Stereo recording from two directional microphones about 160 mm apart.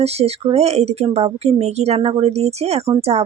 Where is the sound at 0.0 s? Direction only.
40° right (ahead or behind).